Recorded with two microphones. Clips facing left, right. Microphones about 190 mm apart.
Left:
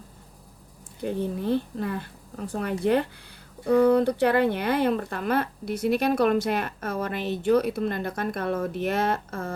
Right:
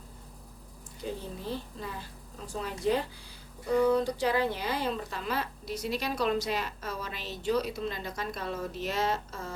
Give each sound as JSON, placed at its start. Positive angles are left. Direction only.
{"t": 1.0, "sound": "a woman's voice", "side_deg": 60}